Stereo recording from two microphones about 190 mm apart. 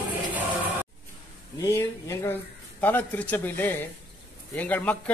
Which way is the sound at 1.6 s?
15° left (ahead or behind).